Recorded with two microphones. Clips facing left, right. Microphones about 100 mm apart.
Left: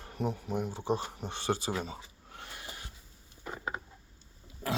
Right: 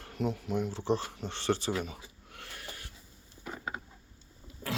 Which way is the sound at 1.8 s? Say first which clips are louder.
Even; 25° left (ahead or behind).